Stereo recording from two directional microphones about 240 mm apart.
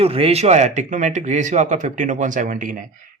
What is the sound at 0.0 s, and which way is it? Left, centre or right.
A man's voice, right.